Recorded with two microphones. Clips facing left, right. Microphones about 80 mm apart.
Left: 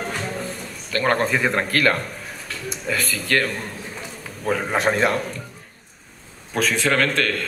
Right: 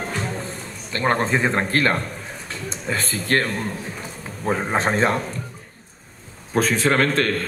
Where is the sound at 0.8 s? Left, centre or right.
Right.